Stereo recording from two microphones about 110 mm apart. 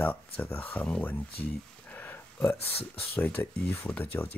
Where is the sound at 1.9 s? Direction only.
20° left (ahead or behind).